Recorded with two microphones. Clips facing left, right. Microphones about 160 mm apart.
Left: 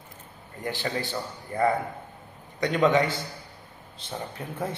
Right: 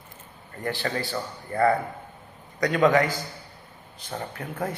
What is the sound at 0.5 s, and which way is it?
A man's voice, 20° left (ahead or behind).